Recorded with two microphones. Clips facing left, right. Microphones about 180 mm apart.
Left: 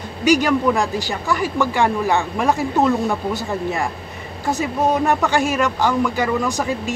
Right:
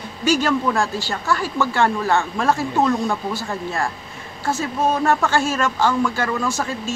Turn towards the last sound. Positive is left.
turn(degrees=15)  # may be behind; listen again after turning